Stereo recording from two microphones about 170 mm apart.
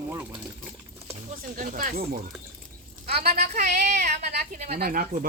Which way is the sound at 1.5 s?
50° right (ahead or behind).